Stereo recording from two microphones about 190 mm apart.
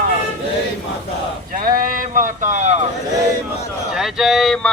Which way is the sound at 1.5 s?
45° right (ahead or behind).